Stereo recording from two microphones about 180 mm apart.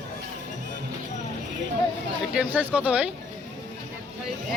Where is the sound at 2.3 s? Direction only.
5° right (ahead or behind).